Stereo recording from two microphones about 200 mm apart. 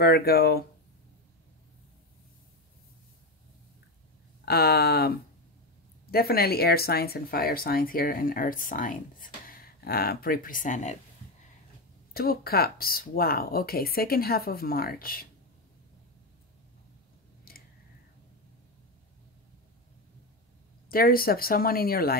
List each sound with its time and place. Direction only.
0.0 s speech: 50° left (ahead or behind)
4.5 s speech: 50° left (ahead or behind)
6.1 s speech: 50° left (ahead or behind)
12.1 s speech: 50° left (ahead or behind)
17.5 s a sound: 45° left (ahead or behind)
20.9 s speech: 45° left (ahead or behind)